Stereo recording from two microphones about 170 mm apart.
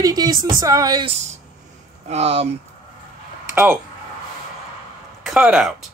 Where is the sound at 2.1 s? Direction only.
40° right (ahead or behind).